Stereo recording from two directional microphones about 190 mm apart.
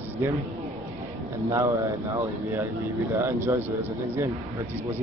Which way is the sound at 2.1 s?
10° right (ahead or behind).